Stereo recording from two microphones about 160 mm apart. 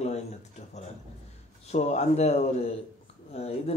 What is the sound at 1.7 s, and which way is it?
Speech, 45° left (ahead or behind).